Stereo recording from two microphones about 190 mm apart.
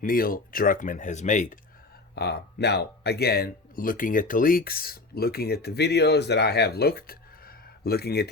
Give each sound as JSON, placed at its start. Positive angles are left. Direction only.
{"t": 0.0, "sound": "speech", "side_deg": 50}
{"t": 2.1, "sound": "speech", "side_deg": 60}